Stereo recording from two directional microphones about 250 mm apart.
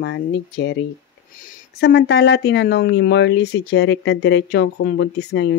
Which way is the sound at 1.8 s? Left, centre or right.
Left.